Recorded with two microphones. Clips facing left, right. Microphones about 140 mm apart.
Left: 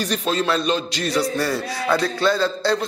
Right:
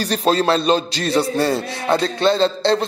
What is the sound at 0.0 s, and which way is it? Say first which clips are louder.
Speech: right 5 dB; 35° right (ahead or behind).